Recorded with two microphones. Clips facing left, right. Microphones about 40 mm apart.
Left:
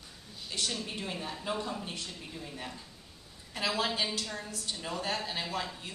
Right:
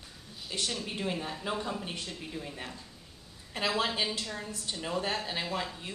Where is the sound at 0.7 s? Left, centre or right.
Centre.